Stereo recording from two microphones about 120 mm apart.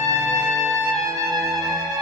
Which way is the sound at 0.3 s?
30° right (ahead or behind).